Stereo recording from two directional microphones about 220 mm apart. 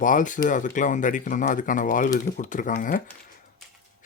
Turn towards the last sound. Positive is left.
turn(degrees=40)  # may be behind; listen again after turning